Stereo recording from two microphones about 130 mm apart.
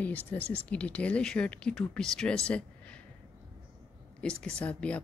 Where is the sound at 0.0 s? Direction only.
15° left (ahead or behind).